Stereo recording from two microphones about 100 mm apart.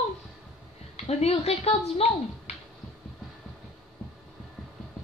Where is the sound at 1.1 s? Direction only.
90° left.